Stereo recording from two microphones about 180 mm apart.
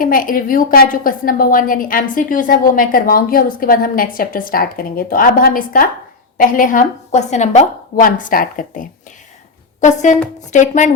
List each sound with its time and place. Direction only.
0.0 s a woman's voice: 50° left (ahead or behind)